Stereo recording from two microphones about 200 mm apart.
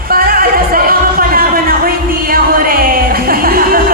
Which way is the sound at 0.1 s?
45° right (ahead or behind).